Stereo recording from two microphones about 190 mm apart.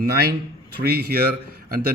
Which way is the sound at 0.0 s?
55° right (ahead or behind).